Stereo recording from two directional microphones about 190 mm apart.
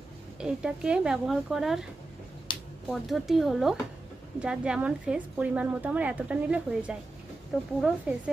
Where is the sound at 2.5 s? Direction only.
25° left (ahead or behind).